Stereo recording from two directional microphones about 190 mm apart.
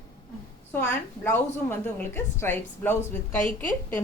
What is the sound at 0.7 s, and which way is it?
A woman's voice, 10° left (ahead or behind).